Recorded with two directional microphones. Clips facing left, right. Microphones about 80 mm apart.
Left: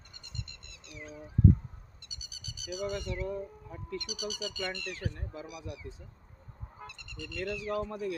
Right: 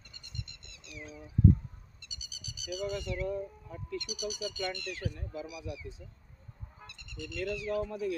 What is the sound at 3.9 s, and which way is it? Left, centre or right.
Speech, left.